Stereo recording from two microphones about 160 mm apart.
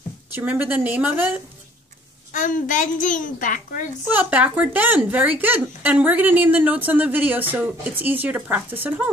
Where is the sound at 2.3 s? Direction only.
55° left (ahead or behind).